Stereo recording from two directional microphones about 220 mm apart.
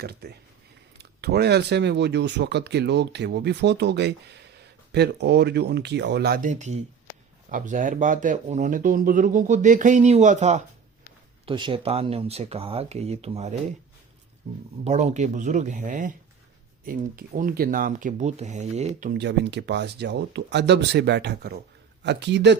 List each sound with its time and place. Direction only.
0.0 s speech: 45° right (ahead or behind); by 13.6 s 30° right (ahead or behind)
14.8 s speech: 30° right (ahead or behind); by 22.5 s 50° right (ahead or behind)